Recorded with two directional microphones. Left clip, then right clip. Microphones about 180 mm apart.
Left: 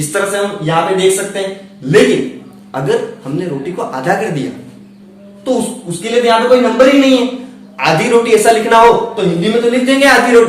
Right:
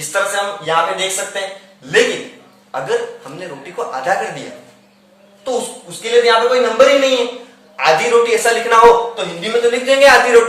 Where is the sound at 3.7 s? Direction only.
15° left (ahead or behind).